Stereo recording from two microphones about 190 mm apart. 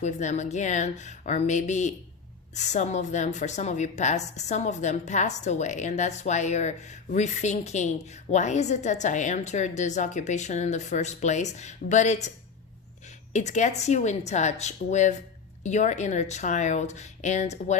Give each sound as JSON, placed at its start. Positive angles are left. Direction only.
{"t": 0.0, "sound": "a woman's voice", "side_deg": 40}
{"t": 13.3, "sound": "a woman's voice", "side_deg": 40}